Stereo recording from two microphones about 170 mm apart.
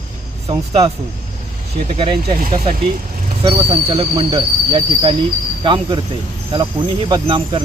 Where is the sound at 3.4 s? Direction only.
30° right (ahead or behind).